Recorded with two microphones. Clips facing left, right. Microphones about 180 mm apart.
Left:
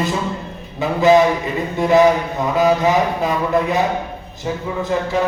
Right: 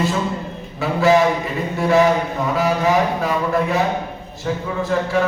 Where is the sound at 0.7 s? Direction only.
20° left (ahead or behind).